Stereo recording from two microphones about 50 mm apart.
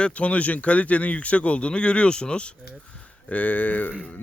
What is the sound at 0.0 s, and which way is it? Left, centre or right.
Speech, left.